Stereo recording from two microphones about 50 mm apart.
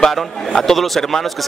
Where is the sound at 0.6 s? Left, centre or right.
Centre.